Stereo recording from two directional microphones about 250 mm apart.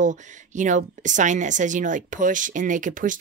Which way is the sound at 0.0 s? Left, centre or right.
Right.